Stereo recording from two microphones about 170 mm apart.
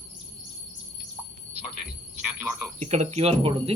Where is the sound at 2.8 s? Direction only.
40° right (ahead or behind).